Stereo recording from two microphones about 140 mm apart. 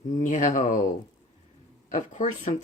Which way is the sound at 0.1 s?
65° left (ahead or behind).